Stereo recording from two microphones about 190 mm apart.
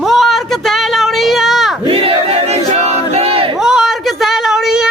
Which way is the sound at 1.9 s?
30° right (ahead or behind).